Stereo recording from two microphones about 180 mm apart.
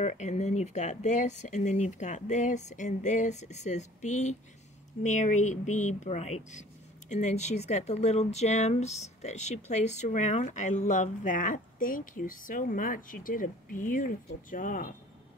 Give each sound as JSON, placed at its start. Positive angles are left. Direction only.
{"t": 0.0, "sound": "speech", "side_deg": 40}